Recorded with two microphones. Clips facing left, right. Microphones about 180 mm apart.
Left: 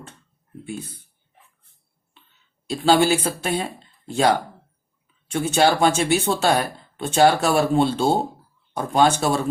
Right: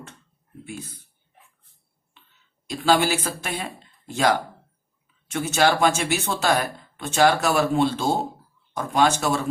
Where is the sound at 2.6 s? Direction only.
30° left (ahead or behind).